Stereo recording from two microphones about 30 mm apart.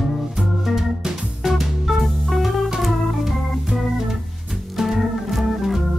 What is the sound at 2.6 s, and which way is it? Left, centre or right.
Organ, centre.